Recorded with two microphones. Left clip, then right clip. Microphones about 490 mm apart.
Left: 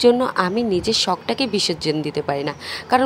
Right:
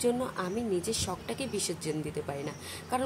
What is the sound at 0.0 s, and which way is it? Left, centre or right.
Speech, right.